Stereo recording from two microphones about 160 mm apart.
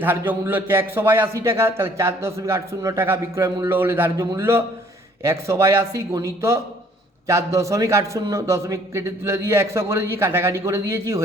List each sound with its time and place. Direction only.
0.0 s a man's voice: 15° right (ahead or behind)